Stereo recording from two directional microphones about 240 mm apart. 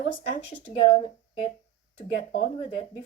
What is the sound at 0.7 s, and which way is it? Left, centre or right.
Speech, left.